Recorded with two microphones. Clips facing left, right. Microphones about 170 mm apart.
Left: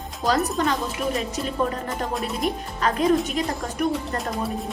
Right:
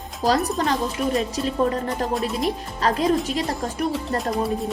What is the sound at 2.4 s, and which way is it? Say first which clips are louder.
A woman's voice: right 1 dB; 35° right (ahead or behind).